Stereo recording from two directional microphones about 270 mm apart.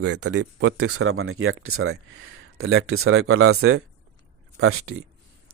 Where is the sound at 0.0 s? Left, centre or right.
Right.